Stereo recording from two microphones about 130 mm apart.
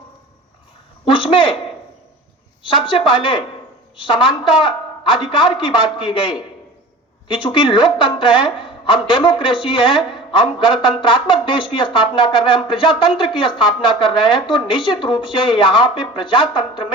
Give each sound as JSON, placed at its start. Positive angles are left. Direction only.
{"t": 1.0, "sound": "speech", "side_deg": 40}
{"t": 2.6, "sound": "a woman's voice", "side_deg": 40}